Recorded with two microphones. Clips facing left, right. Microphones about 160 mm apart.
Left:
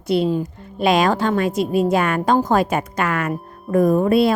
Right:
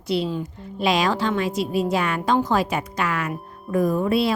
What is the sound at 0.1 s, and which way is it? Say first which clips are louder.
A woman's voice: left 5 dB; 50° left (ahead or behind).